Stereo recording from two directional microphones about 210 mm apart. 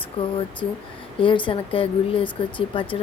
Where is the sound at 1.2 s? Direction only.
25° left (ahead or behind).